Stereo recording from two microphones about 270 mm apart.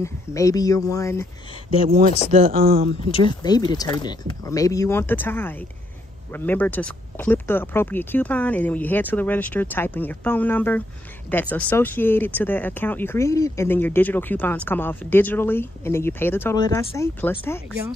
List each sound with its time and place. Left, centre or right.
0.0 s speech: centre
2.3 s speech: right
3.1 s speech: centre